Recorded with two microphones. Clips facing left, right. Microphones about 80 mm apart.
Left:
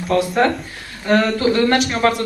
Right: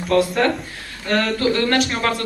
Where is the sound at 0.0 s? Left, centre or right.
Centre.